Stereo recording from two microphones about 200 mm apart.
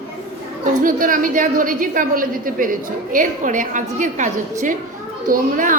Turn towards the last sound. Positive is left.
turn(degrees=-40)  # may be behind; listen again after turning